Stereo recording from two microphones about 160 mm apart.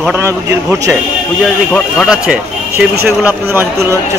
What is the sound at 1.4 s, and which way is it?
Speech, 5° left (ahead or behind).